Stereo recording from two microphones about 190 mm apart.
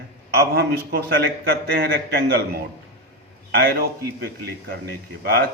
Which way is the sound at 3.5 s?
55° right (ahead or behind).